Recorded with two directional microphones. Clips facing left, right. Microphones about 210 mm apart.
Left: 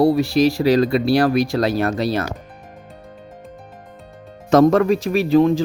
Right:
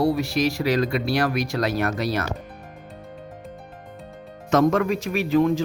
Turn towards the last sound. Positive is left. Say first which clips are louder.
# left 5 dB
turn(degrees=30)  # may be behind; listen again after turning